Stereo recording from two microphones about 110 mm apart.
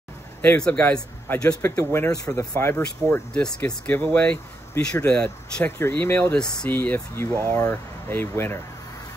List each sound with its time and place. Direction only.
0.4 s speech: 10° left (ahead or behind)
1.6 s speech: 25° left (ahead or behind)
3.1 s speech: 10° left (ahead or behind)
5.8 s speech: 20° left (ahead or behind)